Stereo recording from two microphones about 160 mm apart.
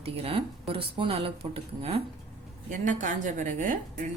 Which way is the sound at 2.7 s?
55° right (ahead or behind).